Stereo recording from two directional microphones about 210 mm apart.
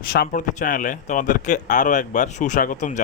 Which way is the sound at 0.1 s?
45° left (ahead or behind).